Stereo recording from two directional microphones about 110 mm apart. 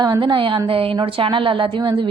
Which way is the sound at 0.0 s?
40° right (ahead or behind).